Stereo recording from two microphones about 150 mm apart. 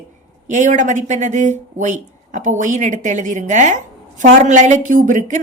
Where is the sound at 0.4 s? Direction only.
55° right (ahead or behind).